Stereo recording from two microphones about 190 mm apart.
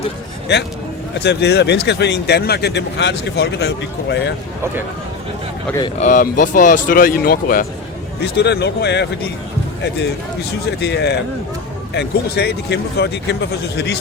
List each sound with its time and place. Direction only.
1.2 s speech: 65° left (ahead or behind)
6.0 s speech: 45° left (ahead or behind)
8.2 s speech: 60° left (ahead or behind)
10.8 s speech: 60° left (ahead or behind)